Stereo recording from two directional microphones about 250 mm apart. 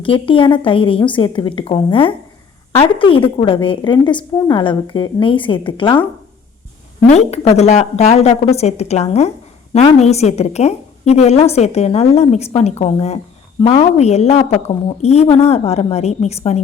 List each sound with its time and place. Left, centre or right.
0.0 s a woman's voice: left
7.1 s a woman's voice: left